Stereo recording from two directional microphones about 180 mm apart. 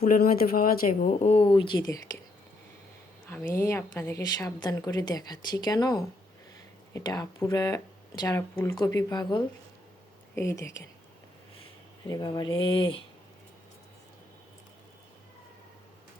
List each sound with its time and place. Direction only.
0.0 s speech: 50° left (ahead or behind); by 2.1 s 20° left (ahead or behind)
3.2 s a woman's voice: 10° left (ahead or behind)
12.0 s a woman's voice: 20° left (ahead or behind)